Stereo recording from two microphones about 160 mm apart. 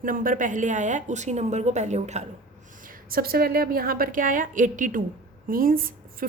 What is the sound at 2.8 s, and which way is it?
A woman's voice, 60° right (ahead or behind).